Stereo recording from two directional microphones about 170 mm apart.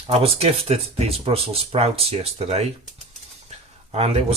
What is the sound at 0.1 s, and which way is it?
Speech, 35° right (ahead or behind).